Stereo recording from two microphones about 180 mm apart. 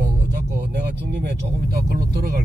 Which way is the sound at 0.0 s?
70° right (ahead or behind).